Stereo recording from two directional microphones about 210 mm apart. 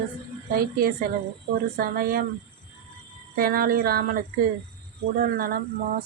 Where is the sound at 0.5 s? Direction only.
45° right (ahead or behind).